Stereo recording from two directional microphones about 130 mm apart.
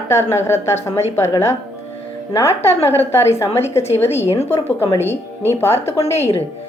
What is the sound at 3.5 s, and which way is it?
Speech, 50° left (ahead or behind).